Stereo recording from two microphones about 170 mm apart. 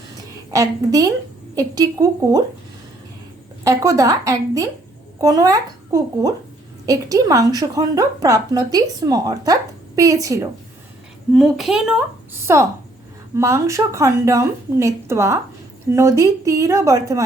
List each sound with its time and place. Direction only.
0.5 s a woman's voice: 20° right (ahead or behind)
3.6 s a woman's voice: 20° right (ahead or behind)
11.3 s a woman's voice: centre (ahead or behind)
12.4 s a woman's voice: 15° right (ahead or behind)